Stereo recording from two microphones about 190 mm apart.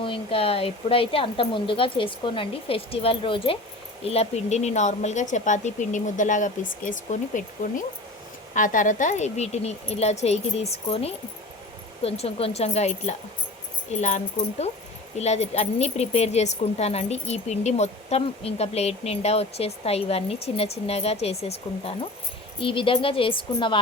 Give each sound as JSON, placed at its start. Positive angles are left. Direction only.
{"t": 0.0, "sound": "speech", "side_deg": 30}
{"t": 15.2, "sound": "speech", "side_deg": 35}